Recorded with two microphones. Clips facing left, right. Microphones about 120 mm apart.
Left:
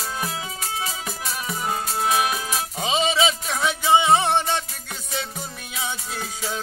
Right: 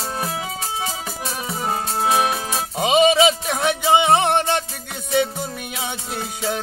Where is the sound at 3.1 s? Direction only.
60° right (ahead or behind).